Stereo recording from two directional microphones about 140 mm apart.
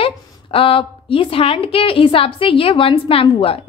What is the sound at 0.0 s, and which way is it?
A woman's voice, 40° left (ahead or behind).